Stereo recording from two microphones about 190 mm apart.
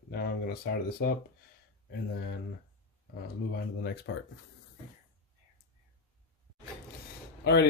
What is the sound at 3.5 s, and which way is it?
Speech, 60° left (ahead or behind).